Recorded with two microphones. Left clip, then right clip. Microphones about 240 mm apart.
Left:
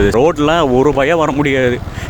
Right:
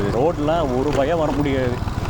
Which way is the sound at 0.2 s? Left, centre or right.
Left.